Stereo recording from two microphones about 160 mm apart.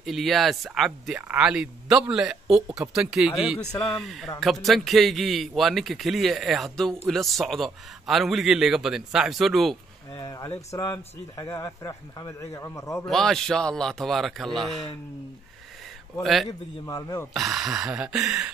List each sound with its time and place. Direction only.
0.0 s speech: centre (ahead or behind)
10.1 s speech: 20° left (ahead or behind)
13.0 s speech: centre (ahead or behind)
16.2 s speech: centre (ahead or behind)
16.8 s speech: 20° left (ahead or behind)
17.3 s speech: centre (ahead or behind)